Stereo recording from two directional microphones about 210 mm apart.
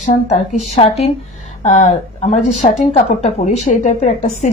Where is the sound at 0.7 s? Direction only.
25° left (ahead or behind).